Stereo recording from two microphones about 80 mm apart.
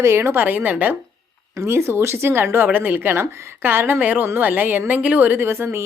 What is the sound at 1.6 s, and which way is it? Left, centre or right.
A woman's voice, right.